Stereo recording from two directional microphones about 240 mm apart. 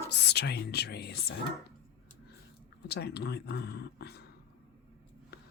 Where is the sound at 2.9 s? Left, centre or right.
Left.